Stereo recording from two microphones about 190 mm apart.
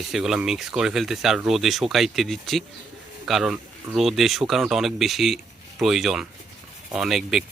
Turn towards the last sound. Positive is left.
turn(degrees=0)  # may be behind; listen again after turning